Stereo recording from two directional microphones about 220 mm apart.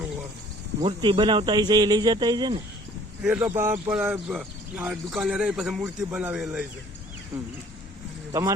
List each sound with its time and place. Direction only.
0.8 s speech: 25° right (ahead or behind)
3.2 s a man's voice: 5° right (ahead or behind)
7.3 s speech: 15° right (ahead or behind)